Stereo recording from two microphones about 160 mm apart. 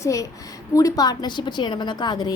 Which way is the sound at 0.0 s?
20° left (ahead or behind).